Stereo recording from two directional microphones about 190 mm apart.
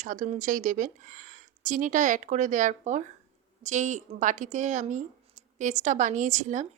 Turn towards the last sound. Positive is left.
turn(degrees=-40)  # may be behind; listen again after turning